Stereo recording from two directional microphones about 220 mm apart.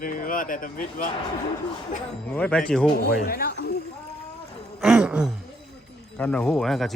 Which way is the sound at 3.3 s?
45° left (ahead or behind).